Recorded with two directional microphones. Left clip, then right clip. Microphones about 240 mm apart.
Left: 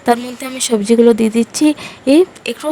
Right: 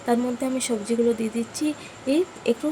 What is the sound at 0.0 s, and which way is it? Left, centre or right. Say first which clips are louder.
Speech: left 8 dB; left.